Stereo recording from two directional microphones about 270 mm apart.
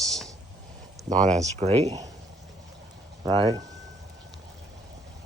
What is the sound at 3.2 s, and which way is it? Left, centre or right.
Speech, centre.